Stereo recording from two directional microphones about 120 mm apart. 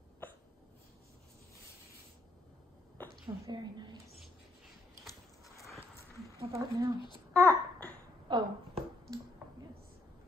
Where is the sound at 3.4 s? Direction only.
35° right (ahead or behind).